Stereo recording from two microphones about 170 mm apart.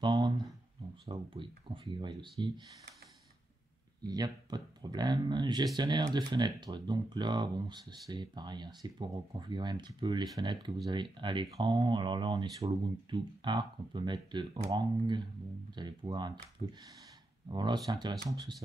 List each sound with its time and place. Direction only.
0.0 s a sound: 25° right (ahead or behind)
1.0 s speech: 30° right (ahead or behind)
4.0 s speech: 25° right (ahead or behind)